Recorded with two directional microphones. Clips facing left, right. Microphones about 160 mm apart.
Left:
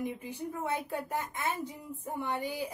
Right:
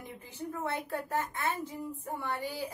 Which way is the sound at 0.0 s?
15° left (ahead or behind).